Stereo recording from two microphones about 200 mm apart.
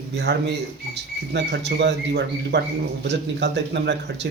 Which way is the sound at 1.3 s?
60° right (ahead or behind).